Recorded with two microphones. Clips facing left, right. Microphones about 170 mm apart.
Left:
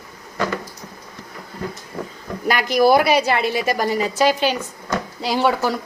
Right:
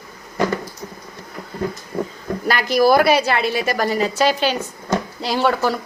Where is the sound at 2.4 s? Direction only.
15° left (ahead or behind).